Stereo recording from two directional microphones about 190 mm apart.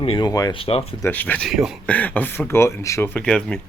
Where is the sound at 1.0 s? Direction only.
10° left (ahead or behind).